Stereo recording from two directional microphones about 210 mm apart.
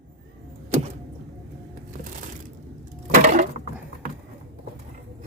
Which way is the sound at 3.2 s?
40° right (ahead or behind).